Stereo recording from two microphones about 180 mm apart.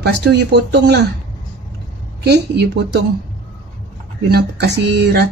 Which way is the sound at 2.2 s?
65° right (ahead or behind).